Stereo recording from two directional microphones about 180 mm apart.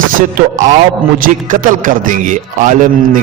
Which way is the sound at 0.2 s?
50° right (ahead or behind).